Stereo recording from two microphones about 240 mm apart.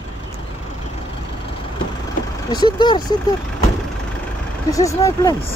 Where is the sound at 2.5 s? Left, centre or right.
Centre.